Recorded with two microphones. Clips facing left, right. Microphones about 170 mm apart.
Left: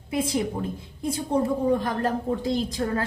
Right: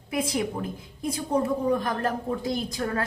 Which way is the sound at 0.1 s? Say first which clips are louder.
Left 2 dB; 30° left (ahead or behind).